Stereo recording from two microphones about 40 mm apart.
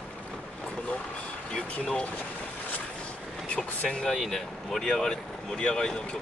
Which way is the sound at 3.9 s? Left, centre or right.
Centre.